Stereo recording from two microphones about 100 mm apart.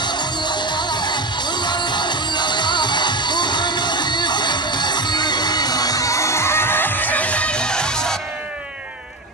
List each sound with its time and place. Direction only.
0.0 s music: 45° left (ahead or behind); by 8.2 s 5° left (ahead or behind)